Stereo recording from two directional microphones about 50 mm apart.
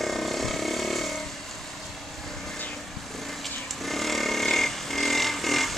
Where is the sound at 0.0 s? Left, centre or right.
Centre.